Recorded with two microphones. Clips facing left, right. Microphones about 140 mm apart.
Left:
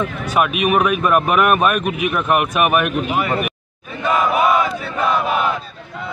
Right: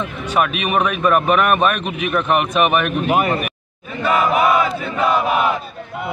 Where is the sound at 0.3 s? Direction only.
10° left (ahead or behind).